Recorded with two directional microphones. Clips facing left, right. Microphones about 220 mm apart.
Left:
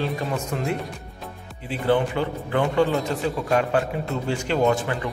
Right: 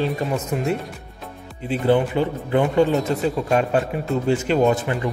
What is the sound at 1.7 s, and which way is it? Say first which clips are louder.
Speech: right 3 dB; 15° right (ahead or behind).